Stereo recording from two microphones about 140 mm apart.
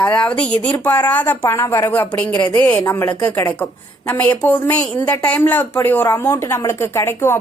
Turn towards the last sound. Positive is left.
turn(degrees=20)  # may be behind; listen again after turning